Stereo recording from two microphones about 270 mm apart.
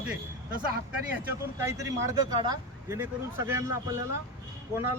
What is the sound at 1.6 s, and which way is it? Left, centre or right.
Speech, centre.